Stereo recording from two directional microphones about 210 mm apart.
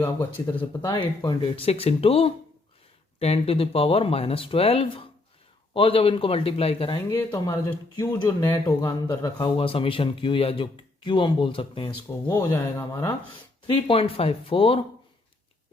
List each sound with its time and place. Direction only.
0.0 s speech: 15° left (ahead or behind)
7.2 s speech: 10° left (ahead or behind)
13.7 s speech: 25° left (ahead or behind)